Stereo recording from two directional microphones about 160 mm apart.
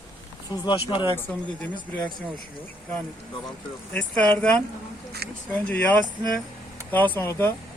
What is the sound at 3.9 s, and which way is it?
Speech, 10° left (ahead or behind).